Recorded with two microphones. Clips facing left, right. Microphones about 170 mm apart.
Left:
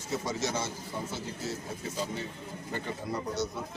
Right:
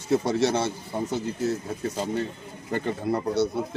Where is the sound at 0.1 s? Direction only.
65° right (ahead or behind).